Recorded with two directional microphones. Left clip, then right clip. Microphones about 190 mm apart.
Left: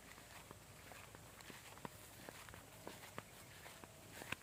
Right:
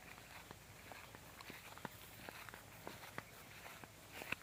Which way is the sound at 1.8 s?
45° right (ahead or behind).